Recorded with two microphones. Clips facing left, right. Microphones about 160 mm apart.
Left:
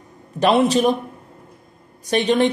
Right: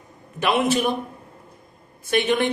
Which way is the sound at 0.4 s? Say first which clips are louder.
Left 5 dB; 35° left (ahead or behind).